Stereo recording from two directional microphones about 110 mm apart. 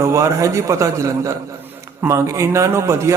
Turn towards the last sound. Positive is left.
turn(degrees=-25)  # may be behind; listen again after turning